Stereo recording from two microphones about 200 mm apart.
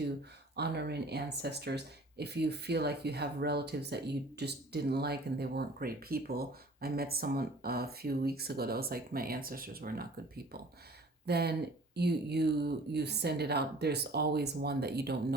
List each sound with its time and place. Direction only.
0.5 s speech: 55° right (ahead or behind)